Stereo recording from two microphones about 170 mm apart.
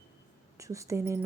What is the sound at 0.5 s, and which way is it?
Speech, 20° right (ahead or behind).